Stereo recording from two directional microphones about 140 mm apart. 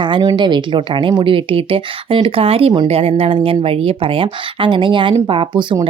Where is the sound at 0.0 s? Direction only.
30° right (ahead or behind).